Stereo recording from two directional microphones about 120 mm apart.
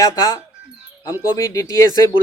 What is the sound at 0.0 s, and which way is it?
Speech, 30° left (ahead or behind).